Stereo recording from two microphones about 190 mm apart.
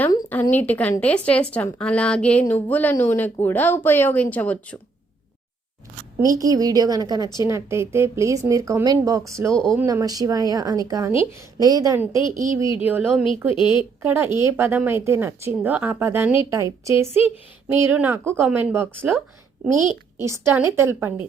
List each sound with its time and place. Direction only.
0.0 s speech: 10° left (ahead or behind)
6.4 s a woman's voice: 20° right (ahead or behind)
9.5 s speech: 5° left (ahead or behind)
9.7 s a woman's voice: 20° right (ahead or behind)
13.6 s a woman's voice: 25° left (ahead or behind)
14.0 s a woman's voice: 10° right (ahead or behind)